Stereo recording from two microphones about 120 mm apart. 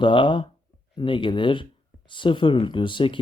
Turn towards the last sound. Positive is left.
turn(degrees=45)  # may be behind; listen again after turning